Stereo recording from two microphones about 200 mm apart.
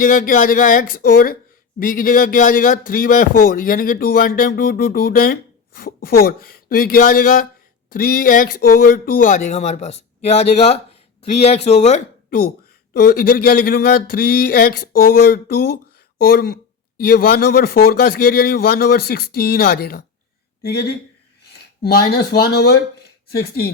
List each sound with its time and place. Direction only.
0.0 s a man's voice: 45° left (ahead or behind)
22.1 s a man's voice: 50° left (ahead or behind)